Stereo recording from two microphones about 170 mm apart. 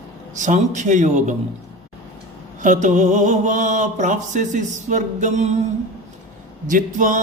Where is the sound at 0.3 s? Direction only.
45° right (ahead or behind).